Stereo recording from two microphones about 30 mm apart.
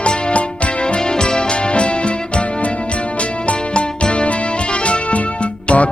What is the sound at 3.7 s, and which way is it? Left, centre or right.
Music, left.